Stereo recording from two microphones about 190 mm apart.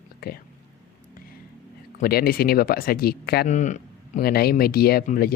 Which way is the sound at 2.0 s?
50° left (ahead or behind).